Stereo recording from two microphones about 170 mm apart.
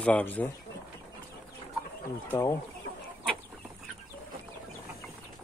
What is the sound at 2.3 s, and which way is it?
Speech, 20° left (ahead or behind).